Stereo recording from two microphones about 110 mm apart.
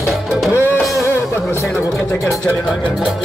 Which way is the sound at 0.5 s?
15° right (ahead or behind).